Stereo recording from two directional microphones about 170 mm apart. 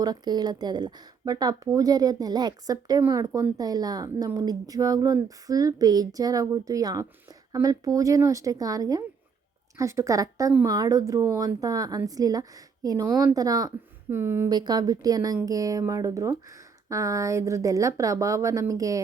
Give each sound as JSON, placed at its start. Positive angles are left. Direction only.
{"t": 0.0, "sound": "speech", "side_deg": -25}